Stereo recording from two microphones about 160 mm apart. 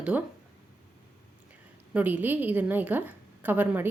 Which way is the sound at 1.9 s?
10° right (ahead or behind).